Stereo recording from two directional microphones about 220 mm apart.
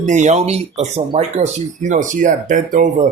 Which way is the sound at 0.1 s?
30° right (ahead or behind).